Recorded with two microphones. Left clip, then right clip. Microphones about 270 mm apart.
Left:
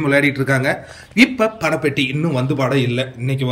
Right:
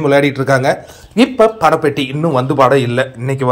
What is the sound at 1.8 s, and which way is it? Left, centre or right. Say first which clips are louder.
A man's voice: right 4 dB; centre.